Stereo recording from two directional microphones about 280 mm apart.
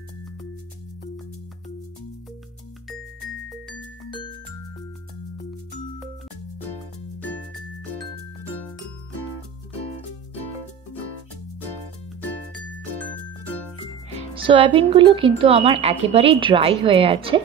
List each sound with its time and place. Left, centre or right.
3.4 s music: centre
14.3 s speech: centre